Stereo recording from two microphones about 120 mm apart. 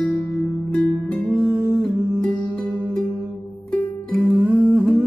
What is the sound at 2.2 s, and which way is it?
Music, 10° left (ahead or behind).